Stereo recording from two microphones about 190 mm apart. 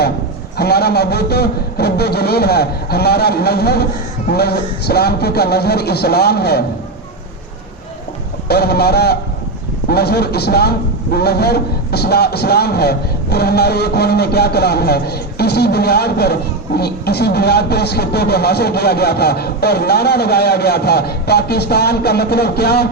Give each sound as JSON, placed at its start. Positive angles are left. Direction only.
{"t": 0.5, "sound": "a man's voice", "side_deg": 55}
{"t": 8.4, "sound": "a man's voice", "side_deg": 55}